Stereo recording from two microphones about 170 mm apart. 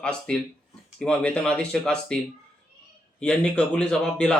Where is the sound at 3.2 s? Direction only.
5° left (ahead or behind).